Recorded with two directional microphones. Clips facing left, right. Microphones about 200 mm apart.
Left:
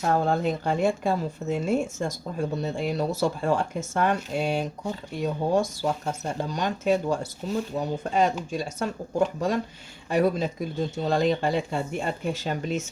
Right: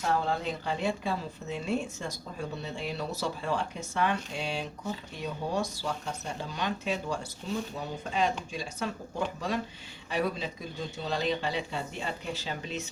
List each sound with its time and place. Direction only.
0.1 s speech: 45° left (ahead or behind)
10.1 s speech: 45° left (ahead or behind)